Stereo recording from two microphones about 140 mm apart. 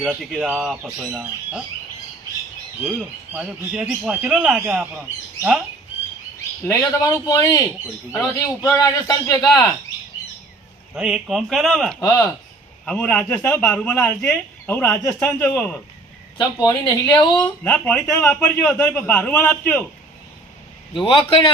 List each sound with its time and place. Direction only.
0.2 s speech: 10° right (ahead or behind)
2.8 s speech: 5° right (ahead or behind)
6.7 s a man's voice: 25° left (ahead or behind)
8.6 s a man's voice: 25° left (ahead or behind)
10.9 s speech: 5° right (ahead or behind)
11.9 s a man's voice: 20° left (ahead or behind)
12.8 s speech: 5° left (ahead or behind)
14.3 s speech: 15° left (ahead or behind)
15.5 s a man's voice: 5° left (ahead or behind)
16.4 s a man's voice: 25° left (ahead or behind)
17.4 s a man's voice: 10° left (ahead or behind)
18.1 s a man's voice: 20° left (ahead or behind)
20.9 s a man's voice: 40° left (ahead or behind)